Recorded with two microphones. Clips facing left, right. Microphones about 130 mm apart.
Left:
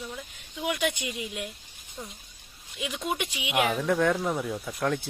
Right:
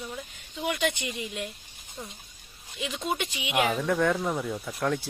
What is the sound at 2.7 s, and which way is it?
Speech, 5° left (ahead or behind).